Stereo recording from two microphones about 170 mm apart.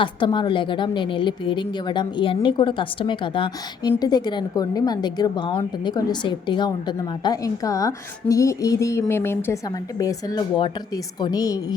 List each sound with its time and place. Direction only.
0.0 s a woman's voice: 30° left (ahead or behind)